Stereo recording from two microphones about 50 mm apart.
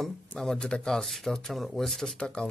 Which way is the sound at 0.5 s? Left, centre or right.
Centre.